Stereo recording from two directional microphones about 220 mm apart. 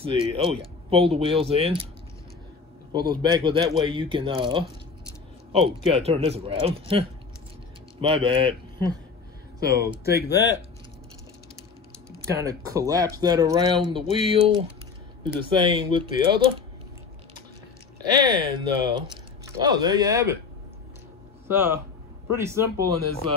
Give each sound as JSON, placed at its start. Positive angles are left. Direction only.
{"t": 0.0, "sound": "speech", "side_deg": -25}
{"t": 2.9, "sound": "speech", "side_deg": -20}
{"t": 9.6, "sound": "speech", "side_deg": 45}
{"t": 12.3, "sound": "speech", "side_deg": -15}
{"t": 18.0, "sound": "speech", "side_deg": -20}
{"t": 21.5, "sound": "speech", "side_deg": -10}